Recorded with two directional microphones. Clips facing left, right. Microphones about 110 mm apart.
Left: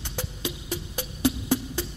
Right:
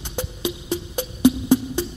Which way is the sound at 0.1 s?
20° right (ahead or behind).